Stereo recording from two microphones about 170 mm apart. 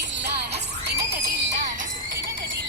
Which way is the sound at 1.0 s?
70° right (ahead or behind).